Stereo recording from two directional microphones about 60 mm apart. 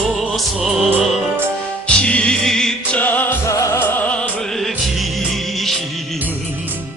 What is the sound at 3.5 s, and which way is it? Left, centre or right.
Music, left.